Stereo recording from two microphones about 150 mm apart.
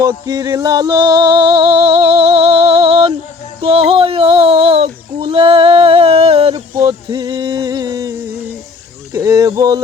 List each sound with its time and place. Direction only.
0.0 s music: 25° right (ahead or behind)
3.6 s child singing: 40° right (ahead or behind)
6.7 s a sound: 25° right (ahead or behind)
9.1 s speech: 20° right (ahead or behind)